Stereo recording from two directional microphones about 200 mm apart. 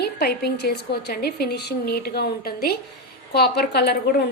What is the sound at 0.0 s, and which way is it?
A woman's voice, 55° left (ahead or behind).